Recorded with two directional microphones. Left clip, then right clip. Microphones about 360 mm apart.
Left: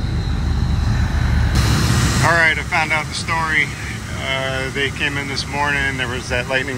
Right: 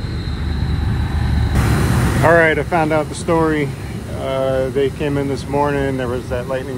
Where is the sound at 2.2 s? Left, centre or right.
Centre.